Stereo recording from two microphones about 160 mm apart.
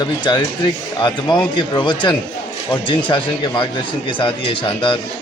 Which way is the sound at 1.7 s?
30° left (ahead or behind).